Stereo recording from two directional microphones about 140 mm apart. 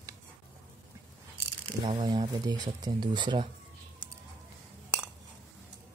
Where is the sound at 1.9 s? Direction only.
30° right (ahead or behind).